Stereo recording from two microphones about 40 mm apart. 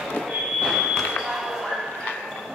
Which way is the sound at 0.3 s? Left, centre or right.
Centre.